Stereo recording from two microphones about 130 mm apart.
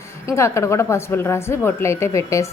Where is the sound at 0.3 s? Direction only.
20° left (ahead or behind).